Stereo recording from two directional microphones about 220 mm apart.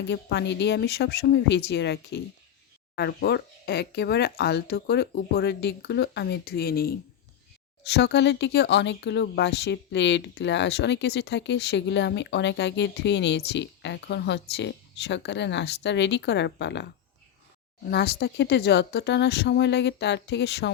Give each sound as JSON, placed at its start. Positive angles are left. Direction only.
{"t": 0.0, "sound": "speech", "side_deg": 50}